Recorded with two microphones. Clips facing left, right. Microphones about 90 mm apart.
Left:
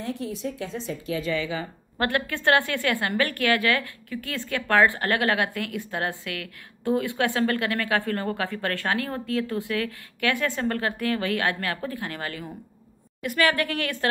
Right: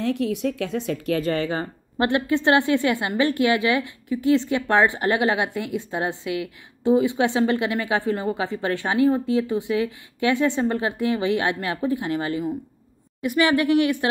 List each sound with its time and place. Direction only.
0.0 s a woman's voice: 70° right (ahead or behind); by 1.7 s 50° right (ahead or behind)
2.0 s a woman's voice: 20° right (ahead or behind)